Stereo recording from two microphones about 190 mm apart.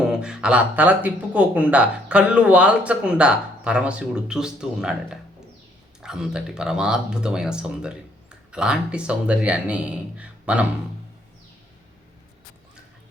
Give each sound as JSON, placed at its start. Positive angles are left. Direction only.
{"t": 0.0, "sound": "speech", "side_deg": -5}
{"t": 6.0, "sound": "speech", "side_deg": -5}